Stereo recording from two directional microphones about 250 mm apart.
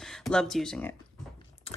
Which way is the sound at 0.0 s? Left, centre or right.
Centre.